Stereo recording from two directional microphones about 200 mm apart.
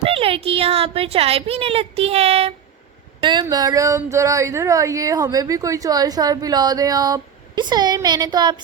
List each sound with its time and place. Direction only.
0.0 s speech: 30° right (ahead or behind)